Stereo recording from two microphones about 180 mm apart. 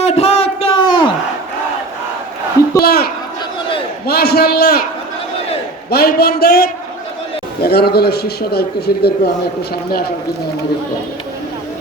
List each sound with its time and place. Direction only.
0.0 s a sound: 35° left (ahead or behind)
2.8 s a man's voice: 60° left (ahead or behind)
5.9 s a man's voice: 60° left (ahead or behind)